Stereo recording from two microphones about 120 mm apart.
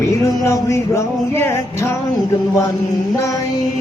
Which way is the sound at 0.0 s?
25° left (ahead or behind).